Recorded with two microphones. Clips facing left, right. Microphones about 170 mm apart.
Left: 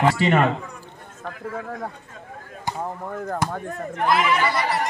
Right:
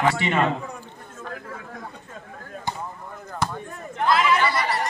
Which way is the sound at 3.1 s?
55° left (ahead or behind).